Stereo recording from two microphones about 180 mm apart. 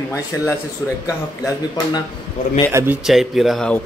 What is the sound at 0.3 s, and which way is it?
Speech, 15° left (ahead or behind).